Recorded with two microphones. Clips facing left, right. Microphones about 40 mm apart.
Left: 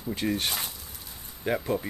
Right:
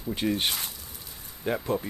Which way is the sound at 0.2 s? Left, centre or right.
Centre.